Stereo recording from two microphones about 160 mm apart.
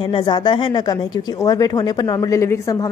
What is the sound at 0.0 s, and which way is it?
Speech, 30° left (ahead or behind).